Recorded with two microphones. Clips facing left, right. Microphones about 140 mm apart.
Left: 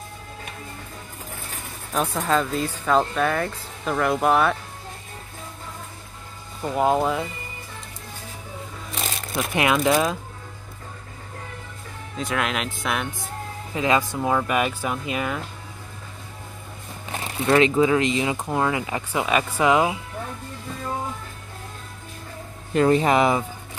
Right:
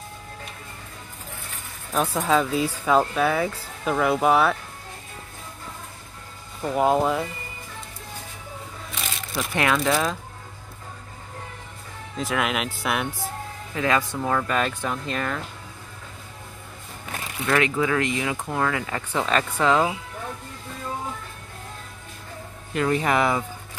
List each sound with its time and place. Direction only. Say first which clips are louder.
2.0 s speech: right 1 dB; 5° right (ahead or behind)
6.6 s speech: even; centre (ahead or behind)
9.3 s speech: left 2 dB; 15° left (ahead or behind)
12.2 s speech: even; centre (ahead or behind)
13.7 s speech: left 2 dB; 20° left (ahead or behind)
17.1 s speech: left 4 dB; 30° left (ahead or behind)
22.8 s speech: left 4 dB; 30° left (ahead or behind)